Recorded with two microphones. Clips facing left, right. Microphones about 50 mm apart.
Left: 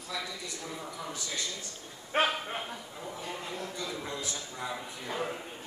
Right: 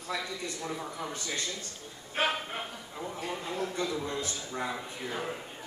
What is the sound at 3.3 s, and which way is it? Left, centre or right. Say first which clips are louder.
Speech: right 5 dB; right.